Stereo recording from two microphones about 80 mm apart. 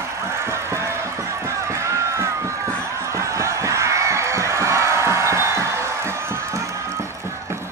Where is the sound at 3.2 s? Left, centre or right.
Right.